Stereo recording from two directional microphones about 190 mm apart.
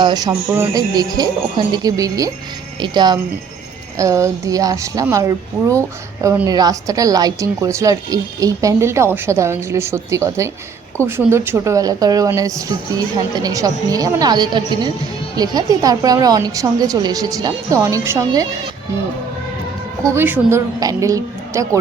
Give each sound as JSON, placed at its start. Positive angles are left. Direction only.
{"t": 0.0, "sound": "a woman's voice", "side_deg": -20}
{"t": 20.1, "sound": "a woman's voice", "side_deg": -10}